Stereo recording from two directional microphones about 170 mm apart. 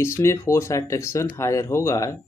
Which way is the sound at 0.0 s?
15° left (ahead or behind).